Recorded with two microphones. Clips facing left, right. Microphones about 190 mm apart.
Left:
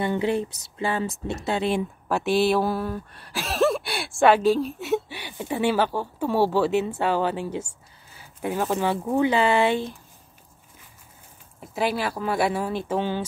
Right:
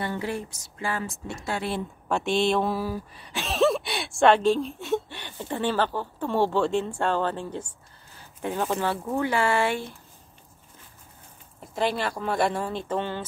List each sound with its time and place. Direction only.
0.0 s speech: 20° left (ahead or behind)
2.0 s speech: 5° left (ahead or behind)
8.1 s a sound: 5° left (ahead or behind)
9.0 s speech: 20° left (ahead or behind)
11.6 s speech: 5° left (ahead or behind)